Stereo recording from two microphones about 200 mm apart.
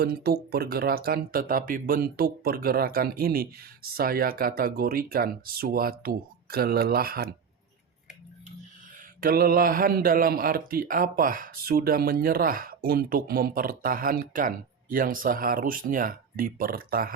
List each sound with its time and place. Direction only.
0.0 s speech: 50° right (ahead or behind)
9.2 s speech: 45° right (ahead or behind)